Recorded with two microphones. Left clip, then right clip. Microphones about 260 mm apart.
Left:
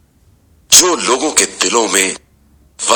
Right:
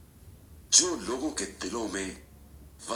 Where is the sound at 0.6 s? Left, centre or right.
Left.